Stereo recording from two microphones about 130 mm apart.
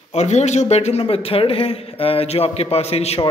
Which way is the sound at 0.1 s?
55° left (ahead or behind).